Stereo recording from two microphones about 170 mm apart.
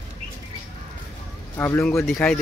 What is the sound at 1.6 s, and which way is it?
Speech, 15° left (ahead or behind).